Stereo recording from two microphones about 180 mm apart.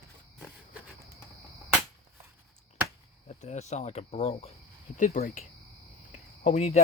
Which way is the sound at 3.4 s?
40° left (ahead or behind).